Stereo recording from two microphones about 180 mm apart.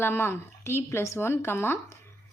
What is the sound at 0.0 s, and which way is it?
Speech, 10° left (ahead or behind).